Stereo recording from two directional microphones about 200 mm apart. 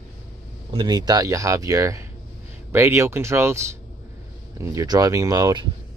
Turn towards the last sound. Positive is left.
turn(degrees=-20)  # may be behind; listen again after turning